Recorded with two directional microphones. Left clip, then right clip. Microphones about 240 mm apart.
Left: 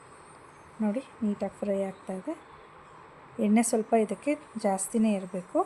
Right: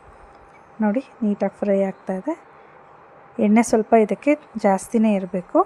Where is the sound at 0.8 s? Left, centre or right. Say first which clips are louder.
Right 9 dB; centre.